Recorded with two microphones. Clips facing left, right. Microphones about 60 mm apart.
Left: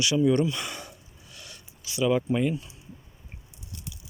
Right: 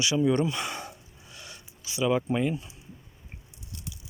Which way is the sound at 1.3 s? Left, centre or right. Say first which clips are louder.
Right 1 dB; right.